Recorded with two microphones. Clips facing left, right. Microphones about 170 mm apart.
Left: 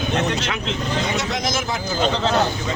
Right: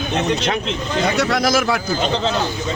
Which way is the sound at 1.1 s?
65° right (ahead or behind).